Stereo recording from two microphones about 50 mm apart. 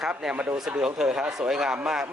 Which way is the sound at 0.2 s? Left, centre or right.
Centre.